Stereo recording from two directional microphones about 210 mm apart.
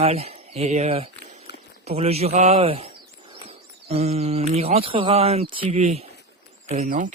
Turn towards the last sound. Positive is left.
turn(degrees=-35)  # may be behind; listen again after turning